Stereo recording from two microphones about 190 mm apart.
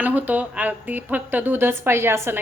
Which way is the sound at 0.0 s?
10° right (ahead or behind).